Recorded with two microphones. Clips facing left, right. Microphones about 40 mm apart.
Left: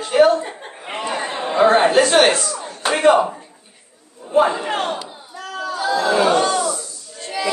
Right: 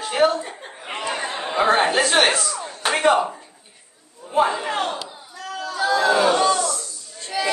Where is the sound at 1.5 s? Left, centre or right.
Centre.